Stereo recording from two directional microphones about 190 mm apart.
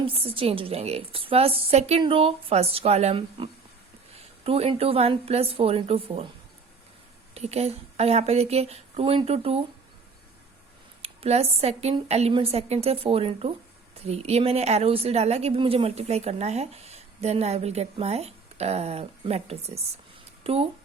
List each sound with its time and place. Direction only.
0.0 s a woman's voice: 30° right (ahead or behind)
7.3 s a woman's voice: 35° right (ahead or behind)
11.0 s a woman's voice: 30° right (ahead or behind)